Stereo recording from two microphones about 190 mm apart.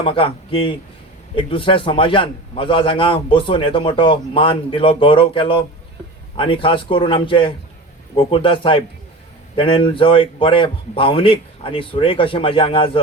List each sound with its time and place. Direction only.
0.0 s a man's voice: 30° left (ahead or behind)